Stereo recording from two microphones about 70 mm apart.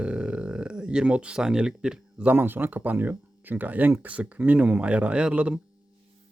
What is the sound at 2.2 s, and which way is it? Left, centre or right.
Speech, right.